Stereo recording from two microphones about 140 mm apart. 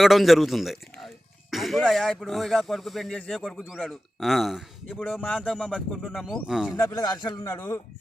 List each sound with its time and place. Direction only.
0.0 s speech: centre (ahead or behind)
5.7 s speech: 5° right (ahead or behind)
6.7 s a man's voice: 25° left (ahead or behind)
7.3 s speech: 20° left (ahead or behind)